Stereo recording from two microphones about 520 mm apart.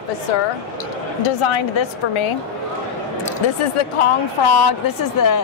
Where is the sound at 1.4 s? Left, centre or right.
Left.